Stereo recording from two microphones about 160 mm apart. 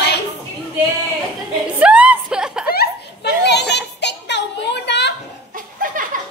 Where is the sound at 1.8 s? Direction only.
5° right (ahead or behind).